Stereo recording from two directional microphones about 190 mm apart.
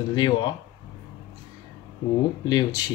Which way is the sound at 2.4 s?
20° left (ahead or behind).